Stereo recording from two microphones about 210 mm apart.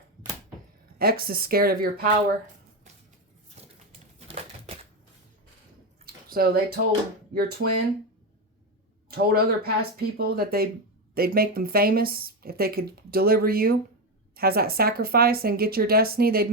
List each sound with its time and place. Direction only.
0.9 s speech: 45° right (ahead or behind)
4.3 s a sound: 30° right (ahead or behind)
6.2 s speech: 45° right (ahead or behind)
9.0 s speech: 50° right (ahead or behind)